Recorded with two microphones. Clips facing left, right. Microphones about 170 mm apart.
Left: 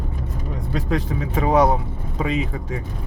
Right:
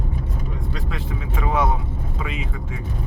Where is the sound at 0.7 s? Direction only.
40° left (ahead or behind).